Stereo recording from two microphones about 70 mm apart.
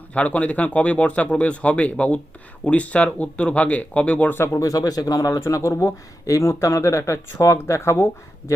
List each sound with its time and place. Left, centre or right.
0.1 s speech: centre
4.4 s speech: left
4.6 s speech: left